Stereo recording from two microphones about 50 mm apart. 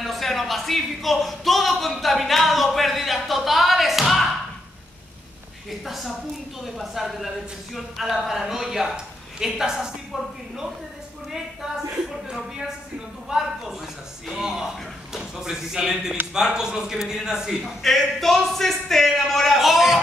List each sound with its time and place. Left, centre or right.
0.0 s speech: centre
5.9 s a man's voice: centre
13.3 s a sound: centre
15.1 s a woman's voice: centre
17.8 s a man's voice: centre